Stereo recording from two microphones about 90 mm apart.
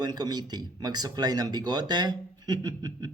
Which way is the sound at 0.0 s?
50° right (ahead or behind).